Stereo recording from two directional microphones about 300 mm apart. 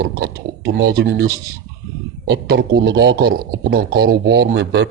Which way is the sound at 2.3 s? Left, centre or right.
Right.